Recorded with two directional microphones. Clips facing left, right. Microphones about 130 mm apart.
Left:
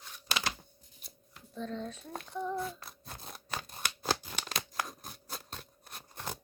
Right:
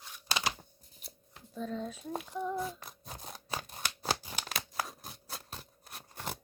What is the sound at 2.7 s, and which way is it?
Scissors, 15° right (ahead or behind).